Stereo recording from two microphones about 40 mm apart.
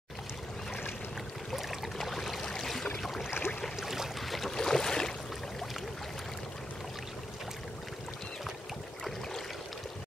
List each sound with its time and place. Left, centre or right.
1.5 s a sound: centre
3.0 s boat: centre
3.3 s boat: left
3.8 s boat: centre
4.4 s boat: centre